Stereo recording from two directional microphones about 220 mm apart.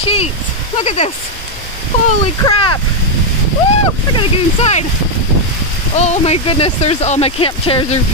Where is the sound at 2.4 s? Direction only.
20° left (ahead or behind).